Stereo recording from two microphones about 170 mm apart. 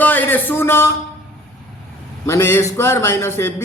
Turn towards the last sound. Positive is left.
turn(degrees=15)  # may be behind; listen again after turning